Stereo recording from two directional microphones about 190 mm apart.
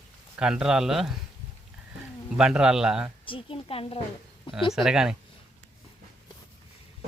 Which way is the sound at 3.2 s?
30° left (ahead or behind).